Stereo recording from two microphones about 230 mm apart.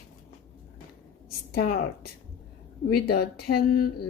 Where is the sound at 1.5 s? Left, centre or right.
Left.